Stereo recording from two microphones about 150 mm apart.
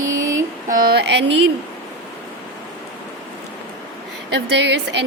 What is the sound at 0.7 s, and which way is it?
Speech, 85° right.